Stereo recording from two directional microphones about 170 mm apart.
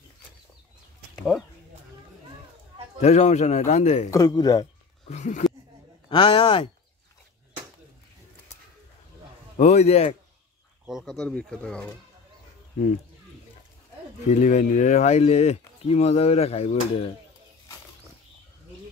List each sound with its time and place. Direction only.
3.0 s speech: 40° left (ahead or behind)
4.1 s speech: 20° left (ahead or behind)
5.1 s speech: 45° left (ahead or behind)
6.0 s speech: 30° left (ahead or behind)
9.6 s speech: 40° left (ahead or behind)
10.9 s speech: centre (ahead or behind)
14.2 s speech: 45° left (ahead or behind)